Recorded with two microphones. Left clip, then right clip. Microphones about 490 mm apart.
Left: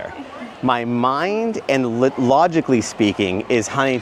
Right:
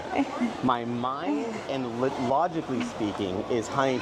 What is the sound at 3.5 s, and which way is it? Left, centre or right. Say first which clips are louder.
Speech: left 6 dB; left.